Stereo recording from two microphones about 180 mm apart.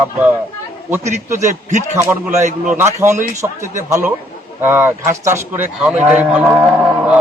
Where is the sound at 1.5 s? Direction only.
45° right (ahead or behind).